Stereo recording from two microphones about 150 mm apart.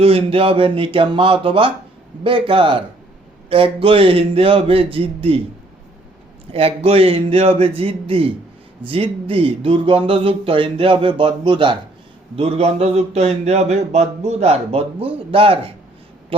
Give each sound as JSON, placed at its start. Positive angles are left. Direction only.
{"t": 0.0, "sound": "speech", "side_deg": -40}
{"t": 6.5, "sound": "speech", "side_deg": -40}